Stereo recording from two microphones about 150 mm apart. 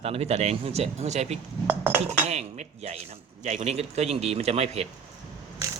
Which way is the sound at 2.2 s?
45° right (ahead or behind).